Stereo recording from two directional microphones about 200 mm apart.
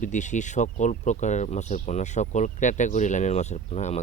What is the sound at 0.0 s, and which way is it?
Speech, 40° left (ahead or behind).